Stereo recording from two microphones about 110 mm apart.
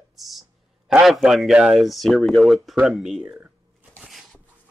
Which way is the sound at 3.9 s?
Centre (ahead or behind).